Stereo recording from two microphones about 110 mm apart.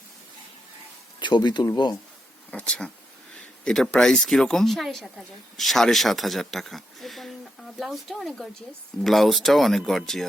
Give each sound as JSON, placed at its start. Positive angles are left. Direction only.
{"t": 1.2, "sound": "speech", "side_deg": 40}
{"t": 2.5, "sound": "speech", "side_deg": 10}